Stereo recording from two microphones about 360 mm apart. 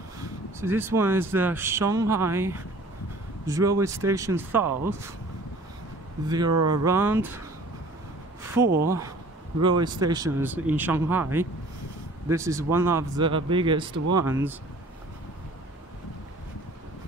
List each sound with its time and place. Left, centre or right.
0.6 s speech: centre
6.2 s speech: centre
6.5 s speech: right
6.8 s speech: centre
8.7 s speech: centre